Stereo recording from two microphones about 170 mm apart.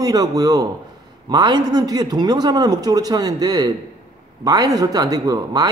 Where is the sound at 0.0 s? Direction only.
20° right (ahead or behind).